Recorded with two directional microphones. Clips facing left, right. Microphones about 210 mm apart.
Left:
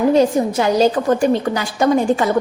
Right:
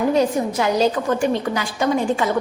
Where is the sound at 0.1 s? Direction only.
30° left (ahead or behind).